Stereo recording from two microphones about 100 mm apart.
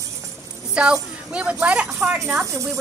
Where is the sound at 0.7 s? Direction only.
10° right (ahead or behind).